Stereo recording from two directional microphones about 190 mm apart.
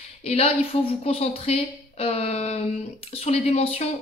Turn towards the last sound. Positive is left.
turn(degrees=30)  # may be behind; listen again after turning